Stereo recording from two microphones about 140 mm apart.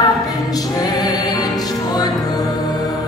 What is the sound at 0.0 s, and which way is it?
Music, 25° left (ahead or behind).